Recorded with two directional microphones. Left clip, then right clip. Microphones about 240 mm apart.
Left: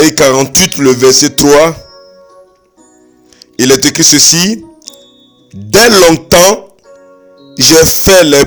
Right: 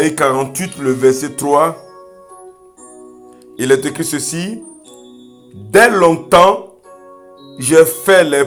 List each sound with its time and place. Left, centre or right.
0.0 s speech: left
3.8 s speech: left
5.8 s speech: left
7.5 s speech: left